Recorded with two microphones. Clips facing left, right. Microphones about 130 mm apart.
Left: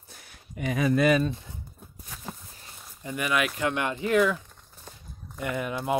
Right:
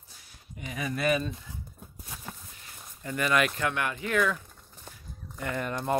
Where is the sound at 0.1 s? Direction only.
70° left (ahead or behind).